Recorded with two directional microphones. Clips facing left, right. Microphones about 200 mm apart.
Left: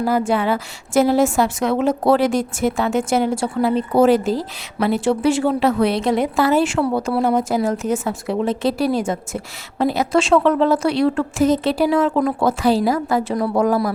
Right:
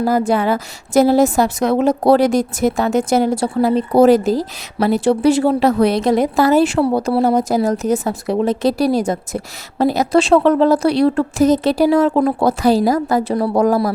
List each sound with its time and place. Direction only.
0.0 s a woman's voice: 40° right (ahead or behind)